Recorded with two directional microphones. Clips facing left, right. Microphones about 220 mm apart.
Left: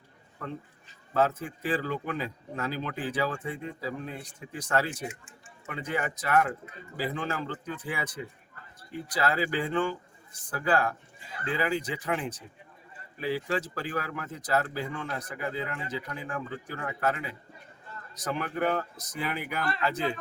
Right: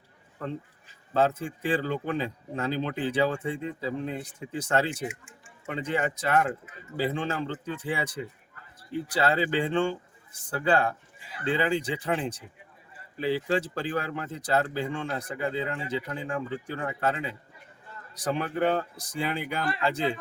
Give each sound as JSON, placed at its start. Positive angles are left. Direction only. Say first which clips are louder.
{"t": 1.1, "sound": "speech", "louder": "right 2 dB", "side_deg": -30}
{"t": 4.9, "sound": "speech", "louder": "right 3 dB", "side_deg": -10}
{"t": 5.6, "sound": "speech", "louder": "right 4 dB", "side_deg": -30}